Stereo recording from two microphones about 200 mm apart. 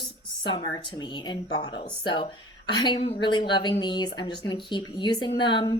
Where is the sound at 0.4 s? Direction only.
25° left (ahead or behind).